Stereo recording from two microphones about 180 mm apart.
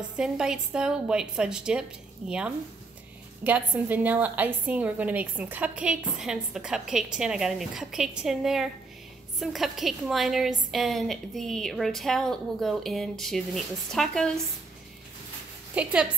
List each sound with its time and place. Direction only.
0.2 s a woman's voice: 5° right (ahead or behind)
15.7 s a woman's voice: 5° right (ahead or behind)